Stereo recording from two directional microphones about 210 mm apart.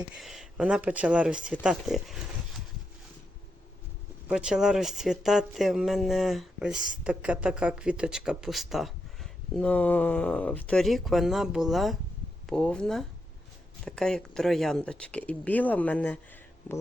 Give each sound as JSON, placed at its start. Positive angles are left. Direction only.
{"t": 0.2, "sound": "speech", "side_deg": 0}
{"t": 4.3, "sound": "speech", "side_deg": -5}